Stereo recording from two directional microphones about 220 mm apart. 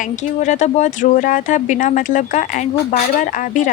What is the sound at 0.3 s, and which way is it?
Speech, 35° left (ahead or behind).